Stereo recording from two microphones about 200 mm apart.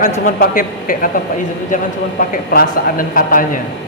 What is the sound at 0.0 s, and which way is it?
Speech, 45° left (ahead or behind).